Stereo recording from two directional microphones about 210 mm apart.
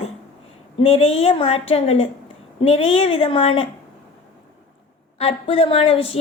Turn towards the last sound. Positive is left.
turn(degrees=25)  # may be behind; listen again after turning